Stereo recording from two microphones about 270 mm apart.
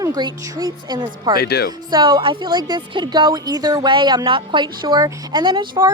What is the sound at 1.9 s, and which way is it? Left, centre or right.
Speech, centre.